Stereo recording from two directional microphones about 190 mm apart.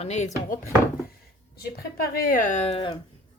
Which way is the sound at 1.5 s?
50° left (ahead or behind).